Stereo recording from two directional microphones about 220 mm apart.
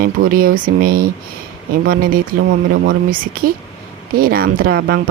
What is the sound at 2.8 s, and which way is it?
Speech, 45° right (ahead or behind).